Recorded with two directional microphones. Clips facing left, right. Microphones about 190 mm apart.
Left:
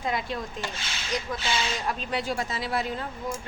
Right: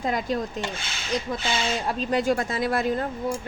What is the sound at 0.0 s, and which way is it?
Speech, 40° right (ahead or behind).